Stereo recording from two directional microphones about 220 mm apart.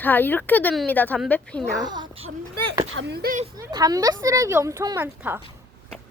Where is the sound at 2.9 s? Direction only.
50° right (ahead or behind).